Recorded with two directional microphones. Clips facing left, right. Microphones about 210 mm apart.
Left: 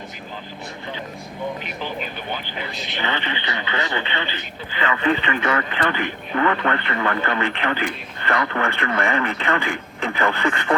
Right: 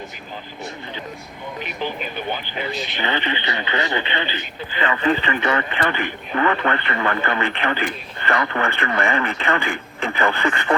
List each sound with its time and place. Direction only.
3.0 s speech: 20° right (ahead or behind)
4.9 s speech: 35° right (ahead or behind)